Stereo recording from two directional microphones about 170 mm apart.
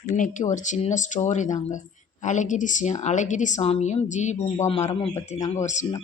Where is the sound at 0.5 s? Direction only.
45° left (ahead or behind).